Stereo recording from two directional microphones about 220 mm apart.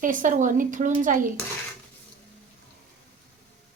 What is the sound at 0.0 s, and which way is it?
Speech, 35° right (ahead or behind).